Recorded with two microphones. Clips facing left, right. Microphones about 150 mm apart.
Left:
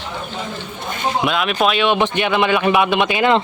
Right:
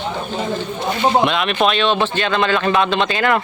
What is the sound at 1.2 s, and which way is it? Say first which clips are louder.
Speech: right 1 dB; centre (ahead or behind).